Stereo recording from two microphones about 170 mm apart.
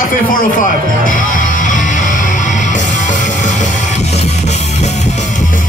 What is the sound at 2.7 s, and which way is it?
Music, 45° left (ahead or behind).